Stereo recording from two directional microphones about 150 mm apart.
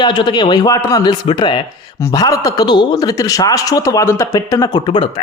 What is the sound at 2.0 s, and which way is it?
Speech, 20° left (ahead or behind).